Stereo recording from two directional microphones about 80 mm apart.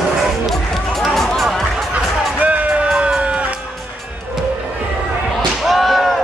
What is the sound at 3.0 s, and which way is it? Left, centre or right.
Run, centre.